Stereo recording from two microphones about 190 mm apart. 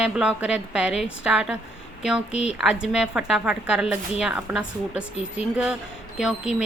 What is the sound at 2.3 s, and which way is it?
Speech, 35° left (ahead or behind).